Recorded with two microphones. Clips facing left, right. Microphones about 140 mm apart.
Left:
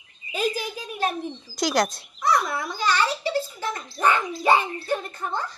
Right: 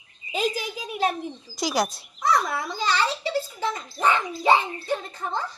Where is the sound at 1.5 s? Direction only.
5° right (ahead or behind).